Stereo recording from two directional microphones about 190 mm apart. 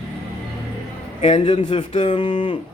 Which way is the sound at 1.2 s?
25° left (ahead or behind).